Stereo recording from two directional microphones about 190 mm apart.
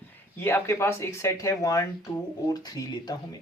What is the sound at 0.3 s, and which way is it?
Speech, 10° left (ahead or behind).